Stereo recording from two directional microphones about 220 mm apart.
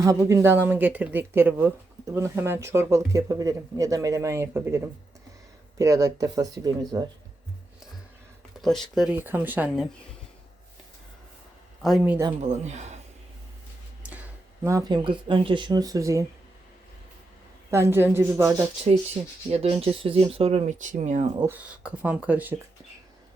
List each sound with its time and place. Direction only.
0.0 s speech: 15° right (ahead or behind)
5.8 s speech: 15° right (ahead or behind)
8.6 s speech: centre (ahead or behind)
11.8 s speech: centre (ahead or behind)
12.4 s speech: 30° right (ahead or behind)
14.6 s speech: 15° right (ahead or behind)
17.7 s speech: 10° right (ahead or behind)
19.5 s speech: 25° right (ahead or behind)
21.3 s speech: 10° right (ahead or behind)